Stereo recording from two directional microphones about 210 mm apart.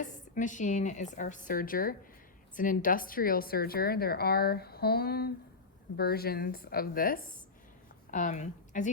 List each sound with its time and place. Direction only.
0.3 s a woman's voice: 35° left (ahead or behind)